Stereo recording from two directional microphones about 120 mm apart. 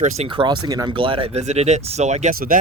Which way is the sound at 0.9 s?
45° right (ahead or behind).